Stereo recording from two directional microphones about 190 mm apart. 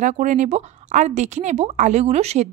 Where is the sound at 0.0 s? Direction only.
40° right (ahead or behind).